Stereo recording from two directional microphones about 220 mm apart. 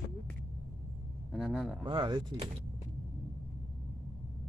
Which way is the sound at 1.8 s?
20° right (ahead or behind).